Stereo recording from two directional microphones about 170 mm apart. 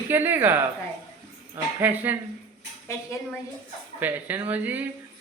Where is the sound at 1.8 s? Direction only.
10° right (ahead or behind).